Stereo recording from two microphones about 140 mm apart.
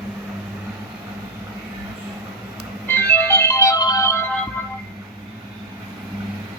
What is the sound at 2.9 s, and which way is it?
Music, 15° left (ahead or behind).